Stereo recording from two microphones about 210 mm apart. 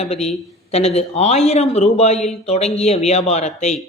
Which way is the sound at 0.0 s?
30° left (ahead or behind).